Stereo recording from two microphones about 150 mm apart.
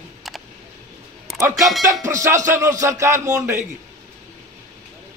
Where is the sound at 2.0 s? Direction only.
20° right (ahead or behind).